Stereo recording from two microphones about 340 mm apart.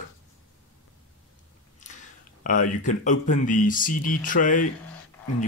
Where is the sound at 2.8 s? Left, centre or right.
Left.